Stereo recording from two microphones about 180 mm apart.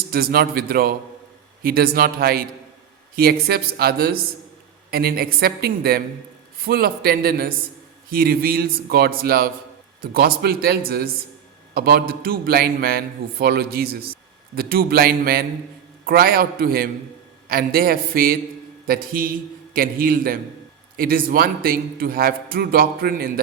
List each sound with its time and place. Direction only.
0.1 s a man's voice: 55° right (ahead or behind)